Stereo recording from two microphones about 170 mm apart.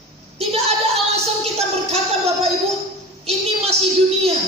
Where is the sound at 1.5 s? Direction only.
40° right (ahead or behind).